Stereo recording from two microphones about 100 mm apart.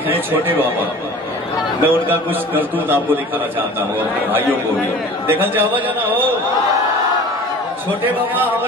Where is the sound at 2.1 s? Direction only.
20° right (ahead or behind).